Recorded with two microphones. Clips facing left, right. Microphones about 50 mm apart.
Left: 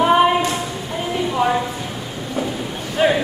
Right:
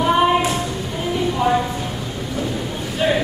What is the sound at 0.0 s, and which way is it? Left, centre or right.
Child singing, centre.